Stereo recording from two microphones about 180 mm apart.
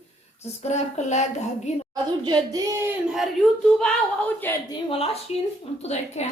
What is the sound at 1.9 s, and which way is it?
A woman's voice, 25° right (ahead or behind).